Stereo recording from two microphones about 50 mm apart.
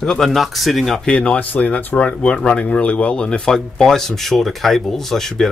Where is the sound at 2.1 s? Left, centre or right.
Centre.